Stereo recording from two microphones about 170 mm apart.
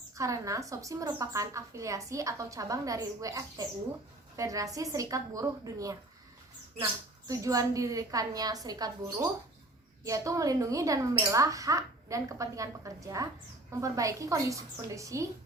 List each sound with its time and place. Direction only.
0.2 s a woman's voice: 20° right (ahead or behind)
10.0 s a woman's voice: 20° right (ahead or behind)